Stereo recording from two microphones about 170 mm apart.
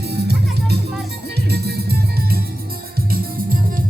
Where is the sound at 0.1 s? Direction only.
75° right (ahead or behind).